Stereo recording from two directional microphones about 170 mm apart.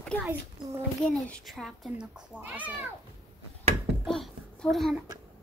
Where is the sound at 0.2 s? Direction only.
10° right (ahead or behind).